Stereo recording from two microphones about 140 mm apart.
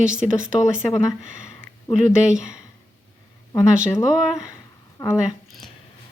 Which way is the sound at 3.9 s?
5° right (ahead or behind).